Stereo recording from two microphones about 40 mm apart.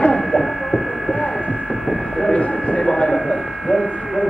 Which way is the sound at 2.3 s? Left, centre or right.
Left.